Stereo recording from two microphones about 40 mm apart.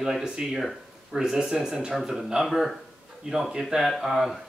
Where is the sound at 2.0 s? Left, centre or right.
Centre.